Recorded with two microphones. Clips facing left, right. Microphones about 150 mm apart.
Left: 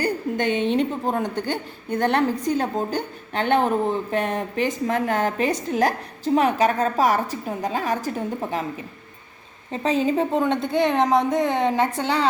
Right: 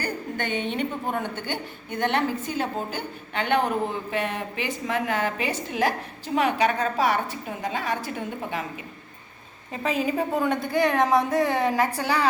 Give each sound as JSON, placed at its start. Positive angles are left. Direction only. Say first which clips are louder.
{"t": 0.5, "sound": "a woman's voice", "louder": "left 6 dB", "side_deg": 0}
{"t": 1.0, "sound": "a woman's voice", "louder": "left 5 dB", "side_deg": 35}
{"t": 9.7, "sound": "a woman's voice", "louder": "left 4 dB", "side_deg": 30}